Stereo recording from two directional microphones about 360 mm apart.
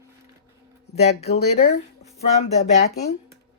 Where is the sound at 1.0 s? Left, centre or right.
Centre.